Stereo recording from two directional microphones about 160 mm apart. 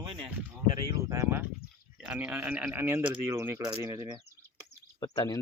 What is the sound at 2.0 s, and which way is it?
A man's voice, 5° right (ahead or behind).